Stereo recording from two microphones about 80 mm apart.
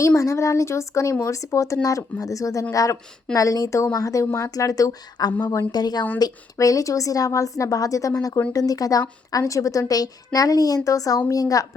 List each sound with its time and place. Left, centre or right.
0.2 s a woman's voice: left